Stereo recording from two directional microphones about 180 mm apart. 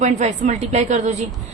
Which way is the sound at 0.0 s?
40° right (ahead or behind).